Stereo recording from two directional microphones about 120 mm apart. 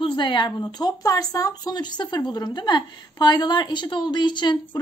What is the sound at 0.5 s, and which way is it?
Speech, 35° left (ahead or behind).